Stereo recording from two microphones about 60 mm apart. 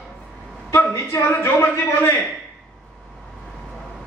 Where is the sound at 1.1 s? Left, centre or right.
Left.